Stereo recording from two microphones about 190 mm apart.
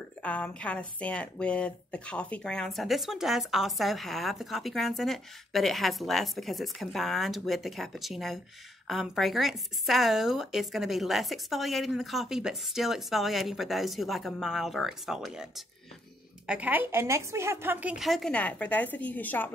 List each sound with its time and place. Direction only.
0.2 s a woman's voice: 5° left (ahead or behind)